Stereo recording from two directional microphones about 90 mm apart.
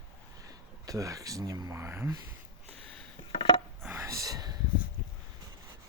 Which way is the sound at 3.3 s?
70° left (ahead or behind).